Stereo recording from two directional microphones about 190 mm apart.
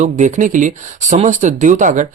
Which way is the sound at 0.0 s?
40° right (ahead or behind).